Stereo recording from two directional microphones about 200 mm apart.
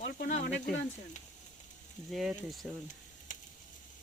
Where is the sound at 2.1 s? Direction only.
Centre (ahead or behind).